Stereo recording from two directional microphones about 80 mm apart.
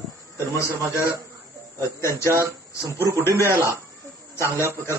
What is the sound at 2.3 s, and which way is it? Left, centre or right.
Speech, right.